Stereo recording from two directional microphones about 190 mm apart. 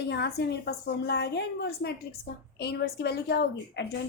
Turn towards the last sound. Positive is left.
turn(degrees=60)  # may be behind; listen again after turning